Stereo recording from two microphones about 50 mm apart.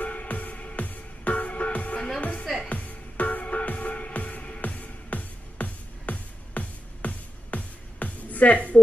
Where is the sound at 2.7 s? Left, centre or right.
Left.